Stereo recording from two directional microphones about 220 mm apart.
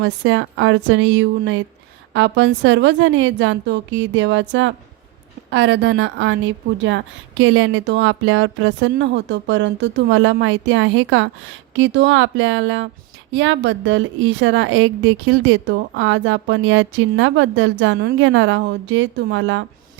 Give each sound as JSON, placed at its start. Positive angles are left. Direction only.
{"t": 0.0, "sound": "a woman's voice", "side_deg": -60}